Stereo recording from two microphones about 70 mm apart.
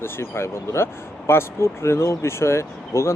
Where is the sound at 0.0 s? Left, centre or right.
Left.